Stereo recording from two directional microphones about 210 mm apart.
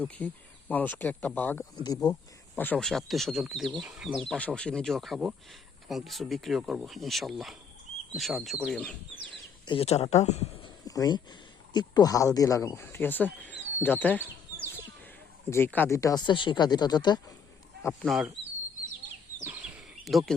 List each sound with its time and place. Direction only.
0.0 s speech: 5° left (ahead or behind)
1.8 s speech: 20° left (ahead or behind)
2.6 s speech: 5° left (ahead or behind)
9.6 s speech: 30° left (ahead or behind)
10.8 s speech: 15° left (ahead or behind)
18.0 s speech: centre (ahead or behind)
19.4 s a sound: 10° right (ahead or behind)